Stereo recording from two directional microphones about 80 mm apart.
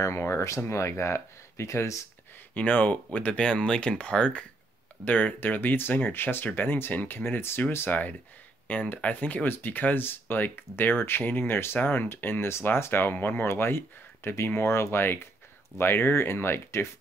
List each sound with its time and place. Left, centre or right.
0.0 s speech: left
2.5 s speech: centre